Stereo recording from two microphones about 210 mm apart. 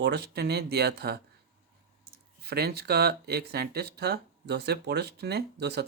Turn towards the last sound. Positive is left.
turn(degrees=-50)  # may be behind; listen again after turning